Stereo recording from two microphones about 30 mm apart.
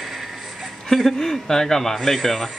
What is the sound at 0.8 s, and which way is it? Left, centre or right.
A man's voice, centre.